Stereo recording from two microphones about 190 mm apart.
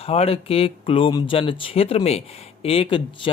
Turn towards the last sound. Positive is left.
turn(degrees=25)  # may be behind; listen again after turning